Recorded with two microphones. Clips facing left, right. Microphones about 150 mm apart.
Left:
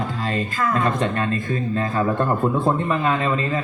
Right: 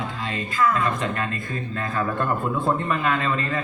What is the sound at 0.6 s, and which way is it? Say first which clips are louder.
A man's voice: even; 35° left (ahead or behind).